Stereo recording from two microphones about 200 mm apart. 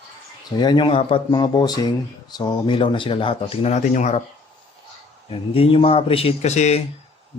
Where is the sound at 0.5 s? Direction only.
20° left (ahead or behind).